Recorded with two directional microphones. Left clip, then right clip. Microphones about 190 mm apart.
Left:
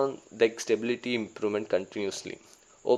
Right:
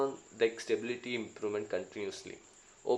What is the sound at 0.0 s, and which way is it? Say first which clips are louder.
Speech: left 6 dB; 45° left (ahead or behind).